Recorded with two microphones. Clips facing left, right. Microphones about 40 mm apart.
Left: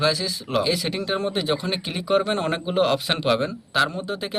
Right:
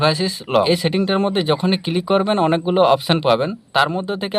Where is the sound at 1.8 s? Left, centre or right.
Centre.